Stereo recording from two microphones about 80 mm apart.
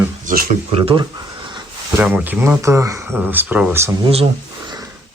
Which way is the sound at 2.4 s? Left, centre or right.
Right.